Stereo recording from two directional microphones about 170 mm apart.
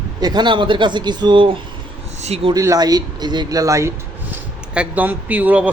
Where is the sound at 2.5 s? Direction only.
20° right (ahead or behind).